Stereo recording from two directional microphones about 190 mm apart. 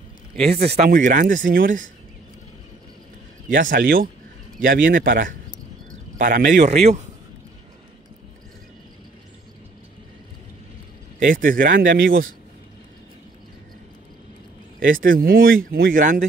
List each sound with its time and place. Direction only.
0.5 s speech: 35° right (ahead or behind)
0.8 s speech: 45° right (ahead or behind)
3.5 s speech: 45° right (ahead or behind)
11.2 s speech: 45° right (ahead or behind)
14.9 s speech: 45° right (ahead or behind)